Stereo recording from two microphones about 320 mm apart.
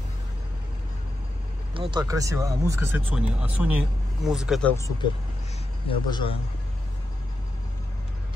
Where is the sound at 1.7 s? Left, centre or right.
Centre.